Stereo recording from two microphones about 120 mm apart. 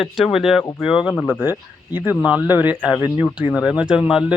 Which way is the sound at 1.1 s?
10° left (ahead or behind).